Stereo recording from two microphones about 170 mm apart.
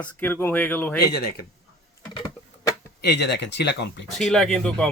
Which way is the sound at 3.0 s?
80° left.